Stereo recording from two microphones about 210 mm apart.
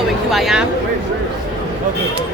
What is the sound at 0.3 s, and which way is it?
Speech, centre (ahead or behind).